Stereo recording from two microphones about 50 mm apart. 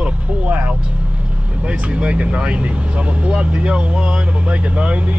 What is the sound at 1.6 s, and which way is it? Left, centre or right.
Speech, right.